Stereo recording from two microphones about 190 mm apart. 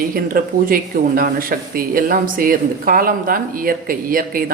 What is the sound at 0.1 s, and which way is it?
Speech, 50° right (ahead or behind).